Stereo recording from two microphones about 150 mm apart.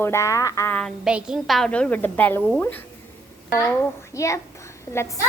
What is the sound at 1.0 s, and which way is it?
A woman's voice, 5° right (ahead or behind).